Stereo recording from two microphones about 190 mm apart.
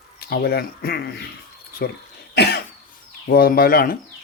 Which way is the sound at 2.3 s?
60° left (ahead or behind).